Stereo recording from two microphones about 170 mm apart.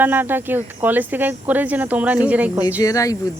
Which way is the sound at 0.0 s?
10° right (ahead or behind).